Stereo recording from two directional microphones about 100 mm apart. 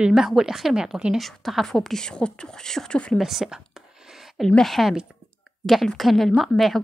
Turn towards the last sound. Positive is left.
turn(degrees=0)  # may be behind; listen again after turning